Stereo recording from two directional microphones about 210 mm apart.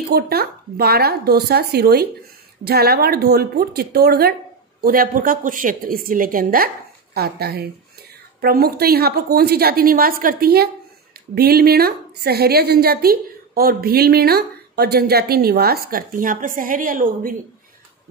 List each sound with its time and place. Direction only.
0.1 s a woman's voice: 50° right (ahead or behind)